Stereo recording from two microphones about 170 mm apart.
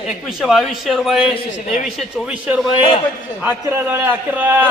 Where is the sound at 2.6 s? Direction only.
35° left (ahead or behind).